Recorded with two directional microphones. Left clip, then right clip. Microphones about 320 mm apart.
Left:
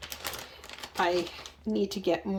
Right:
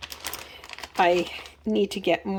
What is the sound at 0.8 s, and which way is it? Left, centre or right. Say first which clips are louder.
Speech: right 7 dB; centre.